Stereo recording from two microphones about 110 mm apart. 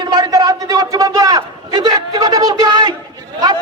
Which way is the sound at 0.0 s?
35° right (ahead or behind).